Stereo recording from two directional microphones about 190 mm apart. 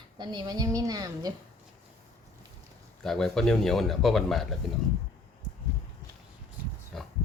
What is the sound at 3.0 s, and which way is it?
Speech, 5° left (ahead or behind).